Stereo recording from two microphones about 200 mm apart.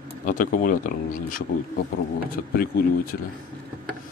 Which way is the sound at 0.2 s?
40° left (ahead or behind).